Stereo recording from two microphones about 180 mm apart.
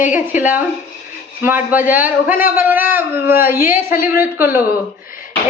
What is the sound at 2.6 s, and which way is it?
Speech, 10° right (ahead or behind).